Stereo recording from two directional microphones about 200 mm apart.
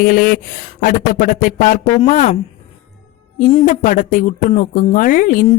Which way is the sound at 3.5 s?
35° left (ahead or behind).